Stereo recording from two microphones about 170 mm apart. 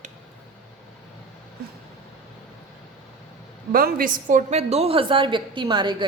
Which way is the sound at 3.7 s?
60° right (ahead or behind).